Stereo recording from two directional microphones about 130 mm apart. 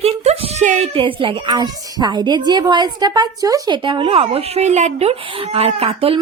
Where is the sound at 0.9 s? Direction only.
40° right (ahead or behind).